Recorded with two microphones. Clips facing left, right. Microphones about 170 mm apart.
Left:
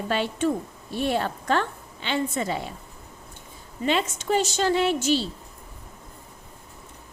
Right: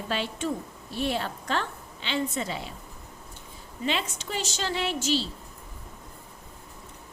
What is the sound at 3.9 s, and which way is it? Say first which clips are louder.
A woman's voice: left 7 dB; 45° left (ahead or behind).